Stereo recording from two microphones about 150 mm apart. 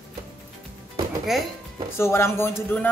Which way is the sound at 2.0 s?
15° left (ahead or behind).